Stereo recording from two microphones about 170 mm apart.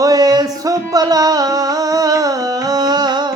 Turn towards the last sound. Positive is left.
turn(degrees=-25)  # may be behind; listen again after turning